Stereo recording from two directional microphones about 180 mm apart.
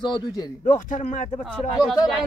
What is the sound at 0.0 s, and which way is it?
Speech, 25° left (ahead or behind).